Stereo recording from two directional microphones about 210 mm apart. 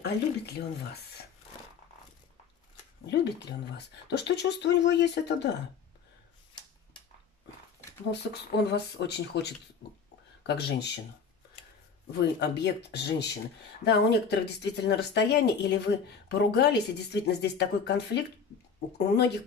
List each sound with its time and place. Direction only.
0.0 s speech: 50° left (ahead or behind)
3.1 s speech: 55° left (ahead or behind)
8.1 s speech: 55° left (ahead or behind)
12.1 s speech: 55° left (ahead or behind)